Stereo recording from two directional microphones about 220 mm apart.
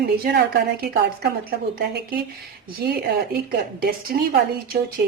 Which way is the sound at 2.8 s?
45° right (ahead or behind).